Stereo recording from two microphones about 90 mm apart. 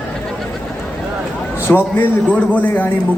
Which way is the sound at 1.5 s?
25° left (ahead or behind).